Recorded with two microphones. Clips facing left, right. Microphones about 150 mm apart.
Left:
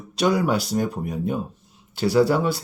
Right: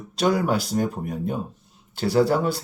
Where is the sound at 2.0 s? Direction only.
50° right (ahead or behind).